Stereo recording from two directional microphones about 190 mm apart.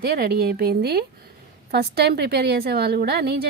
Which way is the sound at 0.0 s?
55° right (ahead or behind).